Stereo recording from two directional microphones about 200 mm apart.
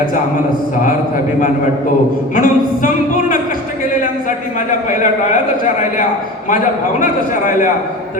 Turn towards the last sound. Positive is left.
turn(degrees=40)  # may be behind; listen again after turning